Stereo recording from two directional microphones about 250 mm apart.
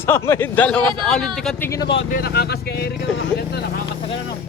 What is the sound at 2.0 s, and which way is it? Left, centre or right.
Speech, left.